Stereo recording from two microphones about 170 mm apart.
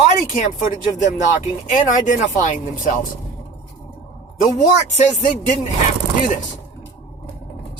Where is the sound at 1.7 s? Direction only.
50° left (ahead or behind).